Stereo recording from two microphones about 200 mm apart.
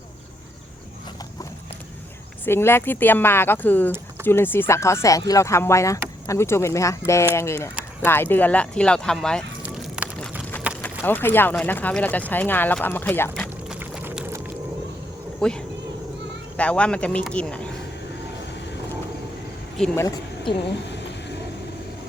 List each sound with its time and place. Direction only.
2.4 s speech: 10° left (ahead or behind)
9.6 s a sound: 5° right (ahead or behind)
11.0 s speech: 10° left (ahead or behind)
13.7 s a sound: 5° right (ahead or behind)
15.4 s speech: 5° left (ahead or behind)
20.0 s a woman's voice: 15° left (ahead or behind)